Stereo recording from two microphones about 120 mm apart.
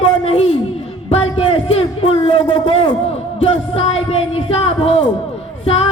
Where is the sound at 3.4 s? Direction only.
60° left (ahead or behind).